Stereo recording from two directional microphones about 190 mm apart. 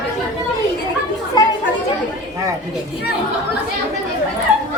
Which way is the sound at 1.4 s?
20° left (ahead or behind).